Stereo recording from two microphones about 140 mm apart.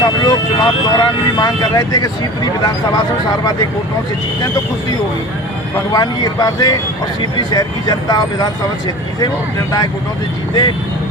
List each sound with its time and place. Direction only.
0.0 s speech: 30° left (ahead or behind)
5.9 s speech: 25° left (ahead or behind)